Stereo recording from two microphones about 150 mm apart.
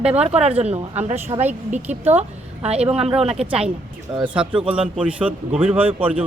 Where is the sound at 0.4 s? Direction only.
45° right (ahead or behind).